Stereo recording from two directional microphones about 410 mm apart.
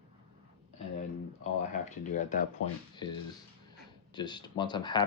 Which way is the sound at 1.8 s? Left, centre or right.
Centre.